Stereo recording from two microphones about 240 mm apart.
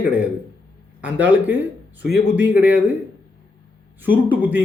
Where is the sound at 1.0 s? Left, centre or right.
Centre.